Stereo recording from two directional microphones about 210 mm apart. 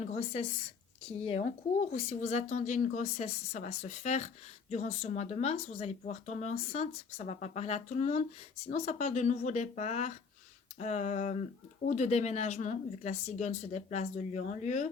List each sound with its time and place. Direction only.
0.0 s a woman's voice: 30° left (ahead or behind)